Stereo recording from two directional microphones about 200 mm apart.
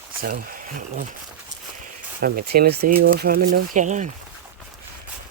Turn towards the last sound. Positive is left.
turn(degrees=-40)  # may be behind; listen again after turning